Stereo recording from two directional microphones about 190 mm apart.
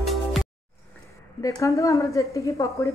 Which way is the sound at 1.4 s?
15° left (ahead or behind).